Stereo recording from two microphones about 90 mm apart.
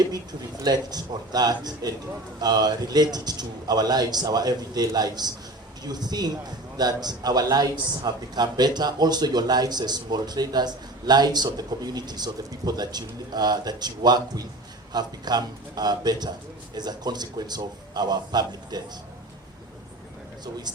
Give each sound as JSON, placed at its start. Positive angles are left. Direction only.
{"t": 0.0, "sound": "a man's voice", "side_deg": -45}
{"t": 20.4, "sound": "a man's voice", "side_deg": -50}